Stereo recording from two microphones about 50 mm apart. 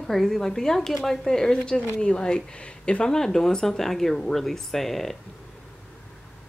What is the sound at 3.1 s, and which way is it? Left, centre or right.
Speech, centre.